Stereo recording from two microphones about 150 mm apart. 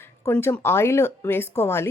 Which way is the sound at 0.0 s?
15° left (ahead or behind).